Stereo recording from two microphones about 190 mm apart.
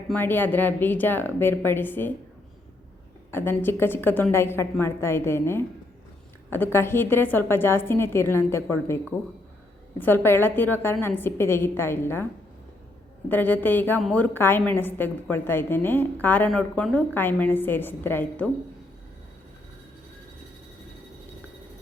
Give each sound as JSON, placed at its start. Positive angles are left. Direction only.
{"t": 0.1, "sound": "a woman's voice", "side_deg": 10}
{"t": 3.3, "sound": "a woman's voice", "side_deg": 10}
{"t": 10.0, "sound": "a woman's voice", "side_deg": 10}
{"t": 13.2, "sound": "a woman's voice", "side_deg": 10}